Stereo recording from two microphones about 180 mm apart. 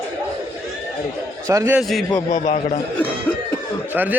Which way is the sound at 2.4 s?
45° left (ahead or behind).